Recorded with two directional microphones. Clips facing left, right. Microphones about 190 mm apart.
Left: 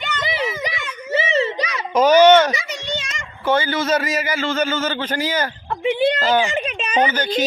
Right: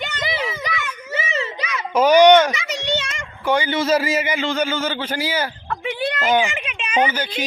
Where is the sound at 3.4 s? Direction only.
15° right (ahead or behind).